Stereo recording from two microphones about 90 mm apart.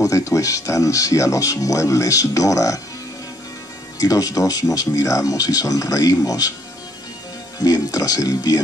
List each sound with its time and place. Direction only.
0.0 s speech: 35° left (ahead or behind)
4.0 s speech: 40° left (ahead or behind)
7.5 s speech: 45° left (ahead or behind)